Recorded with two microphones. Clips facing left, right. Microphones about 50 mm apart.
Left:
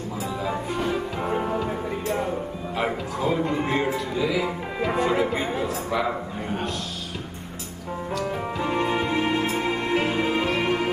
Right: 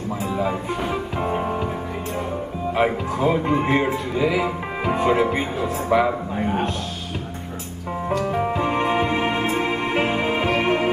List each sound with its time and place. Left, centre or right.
0.4 s music: centre
2.7 s speech: right
8.2 s music: right